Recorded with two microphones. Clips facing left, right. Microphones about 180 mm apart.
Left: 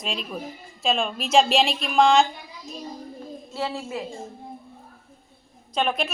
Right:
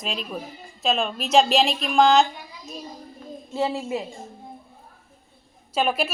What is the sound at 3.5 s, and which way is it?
Speech, 20° right (ahead or behind).